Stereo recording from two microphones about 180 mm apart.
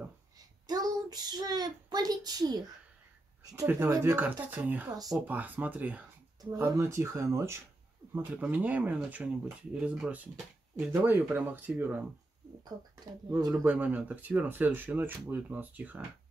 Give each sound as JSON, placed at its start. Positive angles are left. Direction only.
{"t": 0.7, "sound": "a child's voice", "side_deg": -20}
{"t": 13.3, "sound": "speech", "side_deg": -15}